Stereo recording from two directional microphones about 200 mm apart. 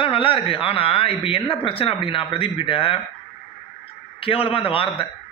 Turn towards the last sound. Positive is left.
turn(degrees=25)  # may be behind; listen again after turning